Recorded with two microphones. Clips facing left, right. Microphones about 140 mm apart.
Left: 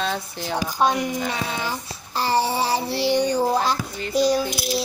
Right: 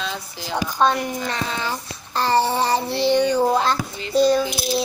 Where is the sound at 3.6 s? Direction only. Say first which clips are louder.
Right 1 dB; 10° left (ahead or behind).